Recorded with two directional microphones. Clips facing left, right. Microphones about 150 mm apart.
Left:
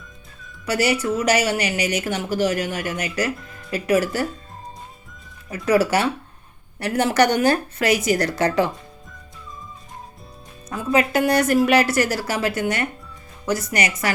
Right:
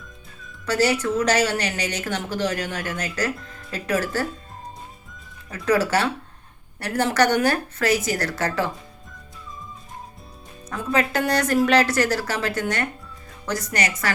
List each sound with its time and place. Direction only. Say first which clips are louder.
0.6 s a woman's voice: even; 10° left (ahead or behind)
5.5 s a woman's voice: left 2 dB; 10° left (ahead or behind)
10.7 s a woman's voice: left 3 dB; 10° left (ahead or behind)